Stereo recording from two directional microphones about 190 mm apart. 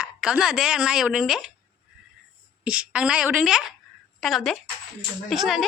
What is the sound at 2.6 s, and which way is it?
Speech, 5° right (ahead or behind).